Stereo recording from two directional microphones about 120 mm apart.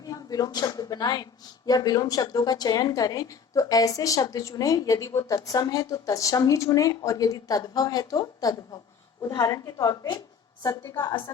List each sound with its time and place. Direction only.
0.0 s speech: 30° left (ahead or behind)